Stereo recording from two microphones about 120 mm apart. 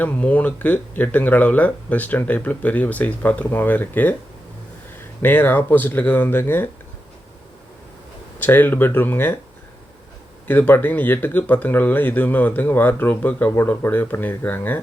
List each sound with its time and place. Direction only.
0.0 s speech: 10° left (ahead or behind)
5.2 s speech: 15° left (ahead or behind)
8.4 s speech: 15° left (ahead or behind)
10.4 s speech: 15° left (ahead or behind)